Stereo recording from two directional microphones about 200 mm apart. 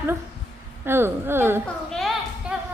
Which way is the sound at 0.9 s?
10° right (ahead or behind).